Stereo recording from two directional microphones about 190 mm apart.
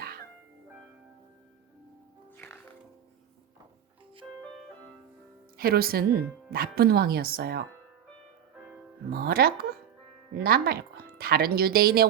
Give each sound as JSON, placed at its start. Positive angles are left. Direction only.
{"t": 2.3, "sound": "music", "side_deg": 10}
{"t": 5.5, "sound": "speech", "side_deg": -50}
{"t": 9.0, "sound": "speech", "side_deg": -55}